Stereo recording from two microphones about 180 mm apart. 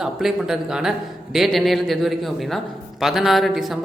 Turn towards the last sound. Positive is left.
turn(degrees=0)  # may be behind; listen again after turning